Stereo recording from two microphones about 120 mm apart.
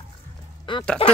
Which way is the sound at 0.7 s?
40° left (ahead or behind).